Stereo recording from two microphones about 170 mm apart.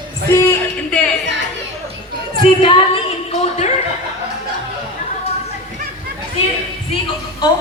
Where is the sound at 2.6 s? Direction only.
30° left (ahead or behind).